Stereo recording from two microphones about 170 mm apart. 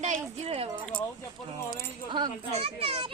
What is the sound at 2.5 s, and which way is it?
Speech, 35° right (ahead or behind).